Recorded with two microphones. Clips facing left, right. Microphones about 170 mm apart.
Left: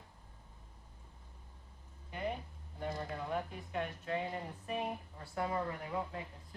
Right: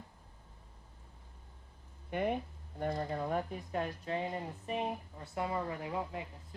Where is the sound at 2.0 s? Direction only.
60° right (ahead or behind).